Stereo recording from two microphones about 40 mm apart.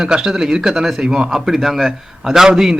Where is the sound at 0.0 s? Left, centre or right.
Centre.